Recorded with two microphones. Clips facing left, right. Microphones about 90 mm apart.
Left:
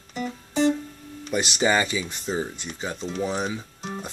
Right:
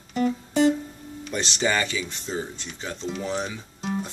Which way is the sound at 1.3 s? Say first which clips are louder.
Left 3 dB; 15° left (ahead or behind).